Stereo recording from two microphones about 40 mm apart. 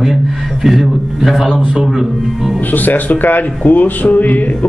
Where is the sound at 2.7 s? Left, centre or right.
Left.